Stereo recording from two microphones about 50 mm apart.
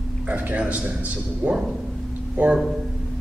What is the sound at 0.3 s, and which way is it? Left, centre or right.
A man's voice, right.